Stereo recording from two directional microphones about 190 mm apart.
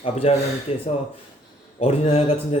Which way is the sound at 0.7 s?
30° left (ahead or behind).